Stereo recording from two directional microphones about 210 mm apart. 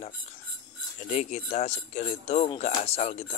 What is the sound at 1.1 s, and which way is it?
Speech, 35° left (ahead or behind).